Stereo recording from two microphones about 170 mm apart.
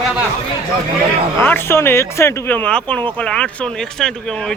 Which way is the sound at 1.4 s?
10° left (ahead or behind).